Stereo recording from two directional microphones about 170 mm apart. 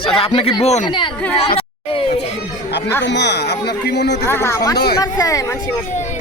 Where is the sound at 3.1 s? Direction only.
85° left.